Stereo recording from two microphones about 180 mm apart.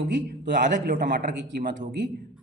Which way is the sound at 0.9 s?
50° right (ahead or behind).